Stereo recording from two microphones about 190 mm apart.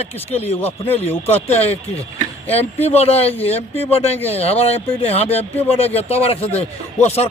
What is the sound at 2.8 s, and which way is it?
Speech, 35° left (ahead or behind).